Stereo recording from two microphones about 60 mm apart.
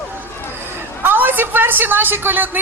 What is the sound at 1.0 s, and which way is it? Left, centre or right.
A man's voice, right.